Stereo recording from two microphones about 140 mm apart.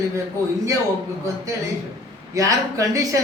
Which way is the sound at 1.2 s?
25° right (ahead or behind).